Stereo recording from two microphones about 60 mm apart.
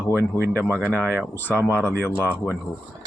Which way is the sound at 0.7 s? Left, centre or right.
Right.